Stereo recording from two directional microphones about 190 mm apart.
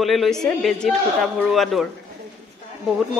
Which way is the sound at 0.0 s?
Centre (ahead or behind).